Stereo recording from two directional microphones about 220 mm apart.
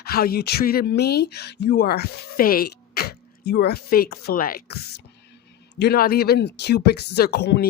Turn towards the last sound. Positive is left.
turn(degrees=45)  # may be behind; listen again after turning